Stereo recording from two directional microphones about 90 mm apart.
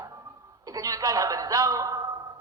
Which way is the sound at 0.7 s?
40° right (ahead or behind).